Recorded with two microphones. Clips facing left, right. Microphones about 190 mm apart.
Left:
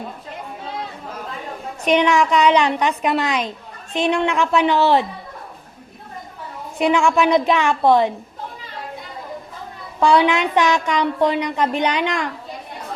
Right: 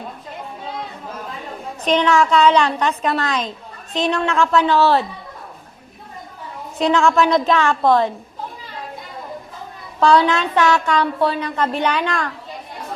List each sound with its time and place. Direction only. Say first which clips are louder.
1.8 s a woman's voice: even; 15° left (ahead or behind)
6.7 s a woman's voice: right 1 dB; 10° left (ahead or behind)
10.0 s a woman's voice: even; 15° left (ahead or behind)